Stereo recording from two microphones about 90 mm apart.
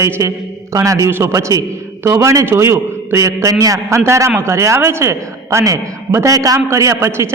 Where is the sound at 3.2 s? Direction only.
40° right (ahead or behind).